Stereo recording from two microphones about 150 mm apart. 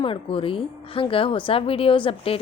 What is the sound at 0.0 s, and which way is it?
A woman's voice, 35° left (ahead or behind).